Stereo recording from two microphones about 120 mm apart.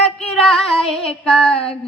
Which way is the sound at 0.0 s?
10° left (ahead or behind).